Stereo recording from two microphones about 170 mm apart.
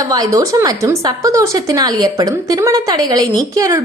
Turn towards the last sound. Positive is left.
turn(degrees=-20)  # may be behind; listen again after turning